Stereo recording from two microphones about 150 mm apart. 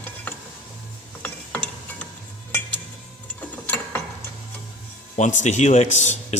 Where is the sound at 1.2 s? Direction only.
10° left (ahead or behind).